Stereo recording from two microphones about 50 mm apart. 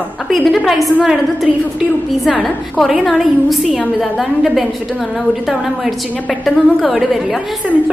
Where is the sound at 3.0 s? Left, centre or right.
Centre.